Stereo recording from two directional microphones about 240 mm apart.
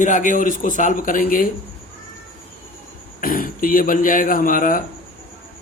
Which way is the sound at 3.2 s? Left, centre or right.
Left.